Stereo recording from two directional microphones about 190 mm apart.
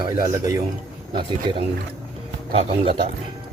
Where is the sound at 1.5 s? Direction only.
25° right (ahead or behind).